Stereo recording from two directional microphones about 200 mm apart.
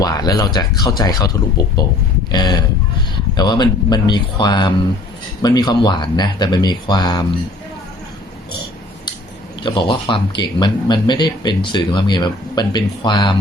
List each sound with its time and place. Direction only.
0.0 s speech: 20° left (ahead or behind)
9.6 s speech: 25° left (ahead or behind)